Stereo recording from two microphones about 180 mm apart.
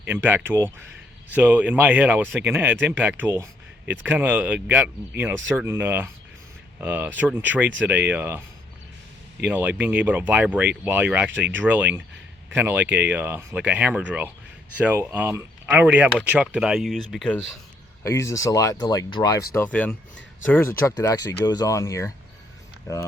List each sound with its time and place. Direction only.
0.1 s speech: 10° right (ahead or behind)
9.4 s speech: 10° right (ahead or behind)
18.0 s speech: 15° left (ahead or behind)
19.5 s speech: 10° left (ahead or behind)